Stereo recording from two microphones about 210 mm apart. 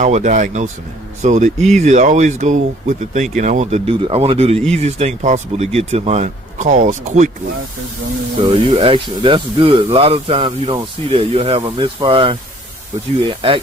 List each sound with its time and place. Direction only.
0.0 s speech: 35° right (ahead or behind)
8.6 s speech: 25° right (ahead or behind)